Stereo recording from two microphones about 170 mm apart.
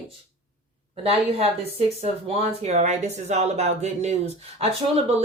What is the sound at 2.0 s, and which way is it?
Speech, 35° right (ahead or behind).